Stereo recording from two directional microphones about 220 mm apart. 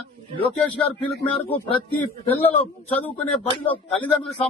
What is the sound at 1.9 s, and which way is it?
A man's voice, 10° left (ahead or behind).